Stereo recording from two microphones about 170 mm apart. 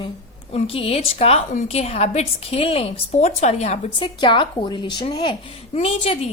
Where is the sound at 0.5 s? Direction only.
35° left (ahead or behind).